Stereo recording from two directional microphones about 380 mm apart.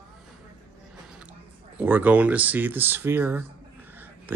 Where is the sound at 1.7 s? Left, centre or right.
Centre.